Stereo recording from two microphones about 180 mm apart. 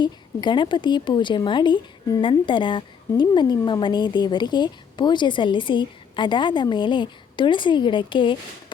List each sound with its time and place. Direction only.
0.0 s a woman's voice: 25° left (ahead or behind)